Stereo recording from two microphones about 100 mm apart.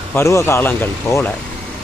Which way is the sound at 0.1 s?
30° left (ahead or behind).